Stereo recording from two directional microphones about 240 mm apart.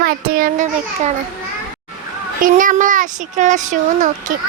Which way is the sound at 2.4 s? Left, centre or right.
Right.